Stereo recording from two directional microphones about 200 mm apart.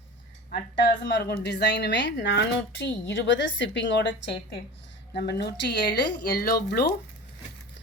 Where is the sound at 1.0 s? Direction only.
55° left (ahead or behind).